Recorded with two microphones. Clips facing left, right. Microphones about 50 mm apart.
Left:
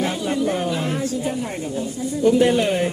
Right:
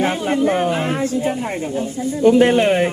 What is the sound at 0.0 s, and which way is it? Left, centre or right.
A woman's voice, right.